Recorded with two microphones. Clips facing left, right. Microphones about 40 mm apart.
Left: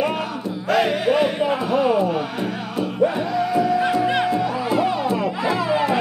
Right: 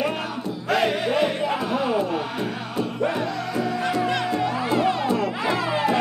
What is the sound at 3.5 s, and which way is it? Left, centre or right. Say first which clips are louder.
Music: left 5 dB; centre.